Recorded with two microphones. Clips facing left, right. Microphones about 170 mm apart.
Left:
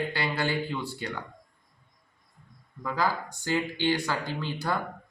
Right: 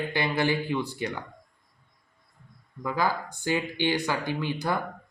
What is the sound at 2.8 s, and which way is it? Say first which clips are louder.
Speech: right 1 dB; 20° right (ahead or behind).